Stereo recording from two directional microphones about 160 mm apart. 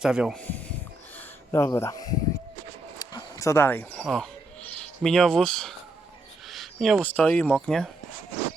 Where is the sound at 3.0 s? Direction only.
25° left (ahead or behind).